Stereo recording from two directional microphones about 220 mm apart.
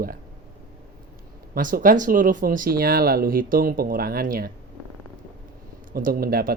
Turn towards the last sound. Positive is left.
turn(degrees=-40)  # may be behind; listen again after turning